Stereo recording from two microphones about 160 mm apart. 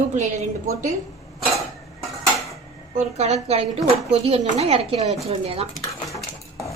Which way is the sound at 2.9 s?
45° right (ahead or behind).